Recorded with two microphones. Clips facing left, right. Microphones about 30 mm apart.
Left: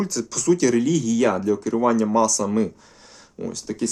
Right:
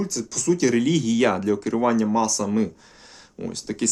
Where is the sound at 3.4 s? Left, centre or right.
Centre.